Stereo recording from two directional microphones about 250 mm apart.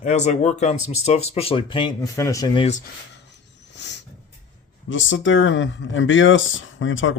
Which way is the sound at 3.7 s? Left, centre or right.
Left.